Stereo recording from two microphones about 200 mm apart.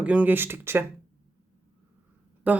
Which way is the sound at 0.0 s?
5° right (ahead or behind).